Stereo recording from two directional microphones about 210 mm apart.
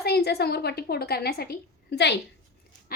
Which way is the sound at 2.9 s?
45° left (ahead or behind).